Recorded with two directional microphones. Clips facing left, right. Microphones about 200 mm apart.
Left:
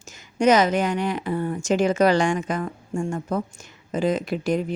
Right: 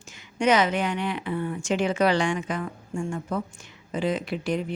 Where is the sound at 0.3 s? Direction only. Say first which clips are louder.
Left 4 dB; 40° left (ahead or behind).